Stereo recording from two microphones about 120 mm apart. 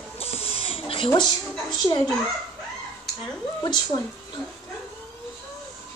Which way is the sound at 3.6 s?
35° left (ahead or behind).